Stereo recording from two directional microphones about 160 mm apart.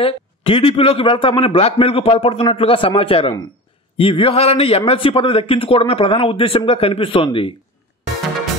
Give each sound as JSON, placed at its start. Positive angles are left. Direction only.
{"t": 0.0, "sound": "a man's voice", "side_deg": 35}